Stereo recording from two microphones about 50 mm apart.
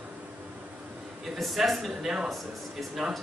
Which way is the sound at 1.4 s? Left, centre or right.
Centre.